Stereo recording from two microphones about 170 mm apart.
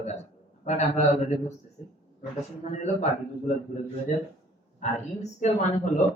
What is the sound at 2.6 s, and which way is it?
Speech, 45° left (ahead or behind).